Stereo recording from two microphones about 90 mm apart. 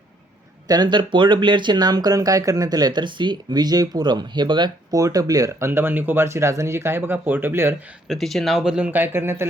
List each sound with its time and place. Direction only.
0.7 s speech: 55° right (ahead or behind)
4.9 s speech: 40° right (ahead or behind); by 7.8 s 25° right (ahead or behind)
8.0 s speech: centre (ahead or behind)
8.9 s speech: 25° right (ahead or behind)